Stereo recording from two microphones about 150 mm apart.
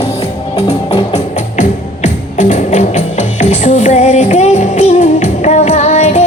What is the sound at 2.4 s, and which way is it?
Music, 55° left (ahead or behind).